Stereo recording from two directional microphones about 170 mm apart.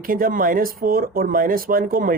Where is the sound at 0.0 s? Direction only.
55° right (ahead or behind).